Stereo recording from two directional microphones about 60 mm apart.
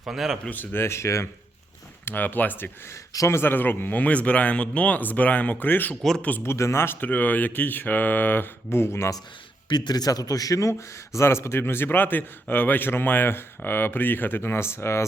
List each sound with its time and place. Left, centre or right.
0.0 s speech: centre
0.5 s speech: left
2.0 s a man's voice: left
6.0 s speech: centre
6.4 s speech: left
7.0 s a man's voice: left
9.9 s a man's voice: left